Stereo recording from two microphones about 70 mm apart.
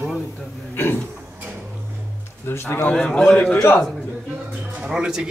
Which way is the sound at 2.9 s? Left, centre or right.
Centre.